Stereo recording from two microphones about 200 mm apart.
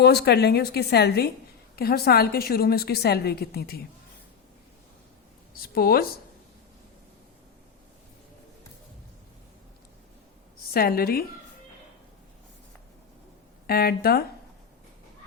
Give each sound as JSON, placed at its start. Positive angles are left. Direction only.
{"t": 0.0, "sound": "a woman's voice", "side_deg": 55}
{"t": 5.5, "sound": "a woman's voice", "side_deg": 50}
{"t": 10.8, "sound": "a woman's voice", "side_deg": 50}
{"t": 13.7, "sound": "a woman's voice", "side_deg": 50}